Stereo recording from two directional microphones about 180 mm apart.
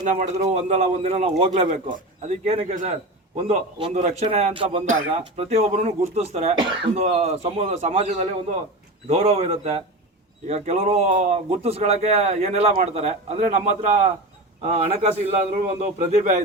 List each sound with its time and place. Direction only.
0.0 s speech: 45° right (ahead or behind)